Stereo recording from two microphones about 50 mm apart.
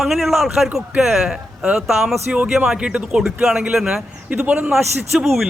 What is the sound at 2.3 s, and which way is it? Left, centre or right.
Speech, right.